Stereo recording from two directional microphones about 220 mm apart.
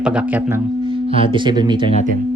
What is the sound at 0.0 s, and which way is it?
Speech, 5° right (ahead or behind).